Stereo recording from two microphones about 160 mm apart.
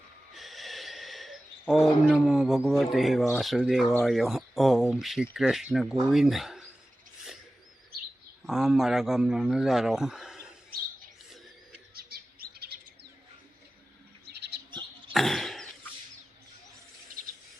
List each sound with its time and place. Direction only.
0.3 s a sound: centre (ahead or behind)
3.3 s speech: centre (ahead or behind)
8.4 s speech: centre (ahead or behind)
11.9 s chirp: 70° right (ahead or behind)
14.3 s bird: 90° right
14.7 s pig: 30° right (ahead or behind)
15.1 s a sound: centre (ahead or behind)